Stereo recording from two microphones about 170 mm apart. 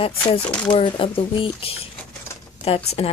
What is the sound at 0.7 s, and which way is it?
Speech, 30° left (ahead or behind).